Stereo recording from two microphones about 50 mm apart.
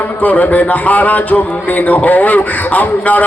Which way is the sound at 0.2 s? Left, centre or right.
Left.